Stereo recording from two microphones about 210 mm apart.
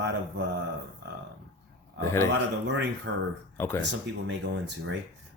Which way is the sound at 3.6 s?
10° left (ahead or behind).